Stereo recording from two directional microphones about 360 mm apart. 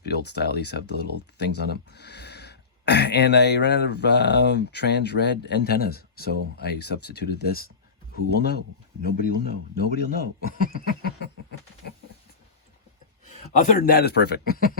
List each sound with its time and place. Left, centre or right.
0.0 s speech: left
9.7 s speech: left
13.2 s speech: left